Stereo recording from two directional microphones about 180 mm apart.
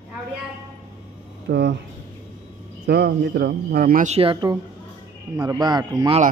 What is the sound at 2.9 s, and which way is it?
Speech, 65° right (ahead or behind).